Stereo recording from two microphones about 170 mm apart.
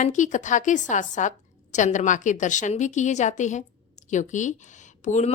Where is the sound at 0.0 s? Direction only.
45° left (ahead or behind).